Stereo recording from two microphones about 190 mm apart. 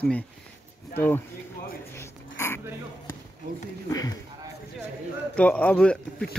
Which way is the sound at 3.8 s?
20° left (ahead or behind).